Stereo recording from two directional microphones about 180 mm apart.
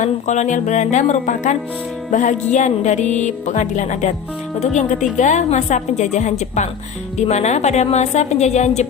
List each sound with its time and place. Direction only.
0.0 s music: 40° left (ahead or behind)